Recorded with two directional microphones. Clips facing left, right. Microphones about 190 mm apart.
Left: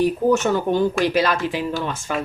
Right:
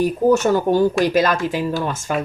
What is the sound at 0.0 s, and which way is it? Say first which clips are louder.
Speech: right 2 dB; 45° right (ahead or behind).